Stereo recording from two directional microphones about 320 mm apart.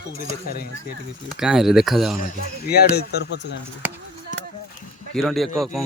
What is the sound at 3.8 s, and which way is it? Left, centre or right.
Speech, centre.